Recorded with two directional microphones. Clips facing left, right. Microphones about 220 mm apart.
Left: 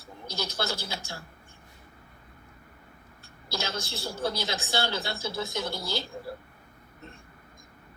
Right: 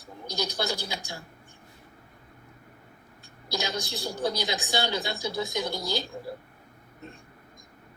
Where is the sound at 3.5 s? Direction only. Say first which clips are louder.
Right 2 dB; 15° right (ahead or behind).